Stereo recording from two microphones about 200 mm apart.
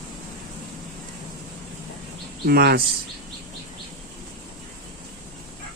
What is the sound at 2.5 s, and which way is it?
Speech, 50° right (ahead or behind).